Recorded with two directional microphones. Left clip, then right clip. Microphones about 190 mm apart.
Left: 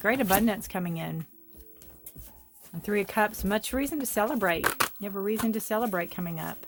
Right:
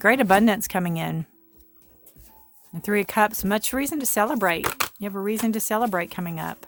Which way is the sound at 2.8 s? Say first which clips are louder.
Right 5 dB; 45° right (ahead or behind).